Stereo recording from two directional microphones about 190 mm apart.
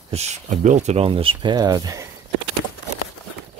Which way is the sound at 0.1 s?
35° right (ahead or behind).